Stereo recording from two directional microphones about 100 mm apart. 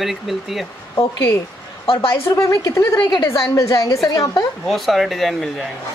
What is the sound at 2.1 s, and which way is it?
Speech, 30° left (ahead or behind).